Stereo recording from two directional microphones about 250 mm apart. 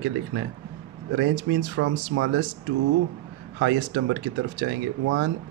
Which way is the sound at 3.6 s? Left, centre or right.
Right.